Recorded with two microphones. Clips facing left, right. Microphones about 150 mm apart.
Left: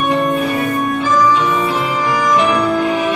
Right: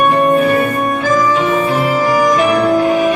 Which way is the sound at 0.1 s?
45° right (ahead or behind).